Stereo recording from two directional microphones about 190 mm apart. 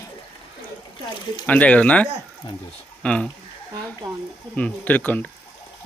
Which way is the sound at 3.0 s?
5° left (ahead or behind).